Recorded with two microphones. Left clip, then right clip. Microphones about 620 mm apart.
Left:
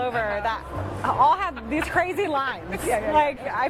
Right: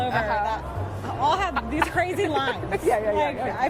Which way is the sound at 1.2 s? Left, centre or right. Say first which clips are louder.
Left 2 dB; left.